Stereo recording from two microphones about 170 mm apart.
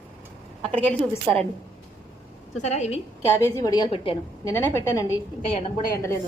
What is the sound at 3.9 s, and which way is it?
Speech, 35° left (ahead or behind).